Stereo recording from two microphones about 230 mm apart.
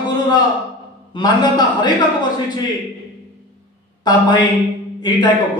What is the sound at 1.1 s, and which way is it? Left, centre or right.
Speech, centre.